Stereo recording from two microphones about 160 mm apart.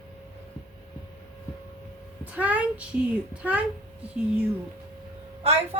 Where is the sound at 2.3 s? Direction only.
10° right (ahead or behind).